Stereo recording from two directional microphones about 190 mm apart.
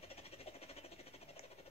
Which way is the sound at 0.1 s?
30° left (ahead or behind).